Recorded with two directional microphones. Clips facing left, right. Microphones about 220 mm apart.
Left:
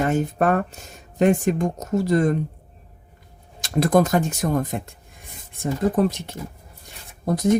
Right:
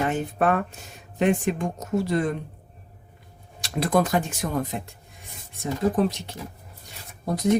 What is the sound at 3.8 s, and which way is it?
Speech, 45° left (ahead or behind).